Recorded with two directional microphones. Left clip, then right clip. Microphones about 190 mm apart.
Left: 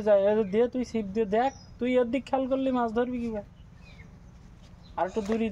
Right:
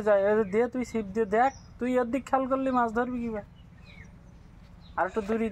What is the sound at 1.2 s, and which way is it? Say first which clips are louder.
Speech: right 2 dB; 20° left (ahead or behind).